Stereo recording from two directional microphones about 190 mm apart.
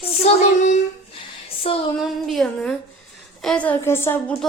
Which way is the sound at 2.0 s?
Centre (ahead or behind).